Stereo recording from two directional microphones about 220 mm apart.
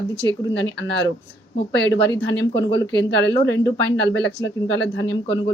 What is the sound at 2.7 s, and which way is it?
Speech, 55° left (ahead or behind).